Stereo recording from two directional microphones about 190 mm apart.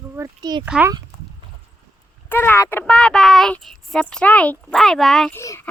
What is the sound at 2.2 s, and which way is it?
A child's voice, 10° left (ahead or behind).